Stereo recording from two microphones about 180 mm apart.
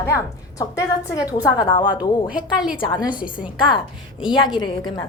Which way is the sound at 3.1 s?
50° left (ahead or behind).